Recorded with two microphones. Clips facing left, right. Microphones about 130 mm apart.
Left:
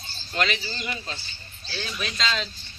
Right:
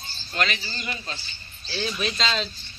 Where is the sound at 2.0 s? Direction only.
Centre (ahead or behind).